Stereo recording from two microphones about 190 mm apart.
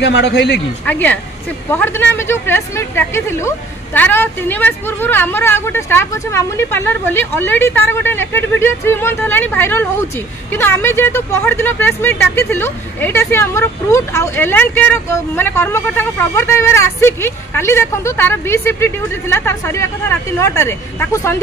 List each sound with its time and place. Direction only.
0.0 s a man's voice: 70° left (ahead or behind)
0.8 s speech: 10° left (ahead or behind)